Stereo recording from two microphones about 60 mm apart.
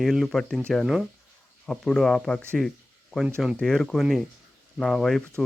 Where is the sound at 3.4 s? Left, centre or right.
Centre.